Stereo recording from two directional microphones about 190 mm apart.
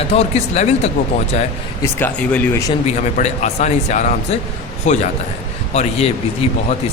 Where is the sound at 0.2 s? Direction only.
35° left (ahead or behind).